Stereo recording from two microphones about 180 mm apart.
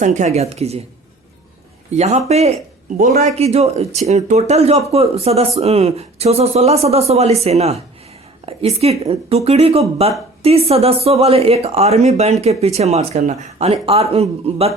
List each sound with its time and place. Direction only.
0.0 s speech: 40° right (ahead or behind)
1.9 s speech: 40° right (ahead or behind)